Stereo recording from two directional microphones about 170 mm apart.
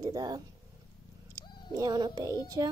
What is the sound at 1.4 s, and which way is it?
Wild animals, 25° left (ahead or behind).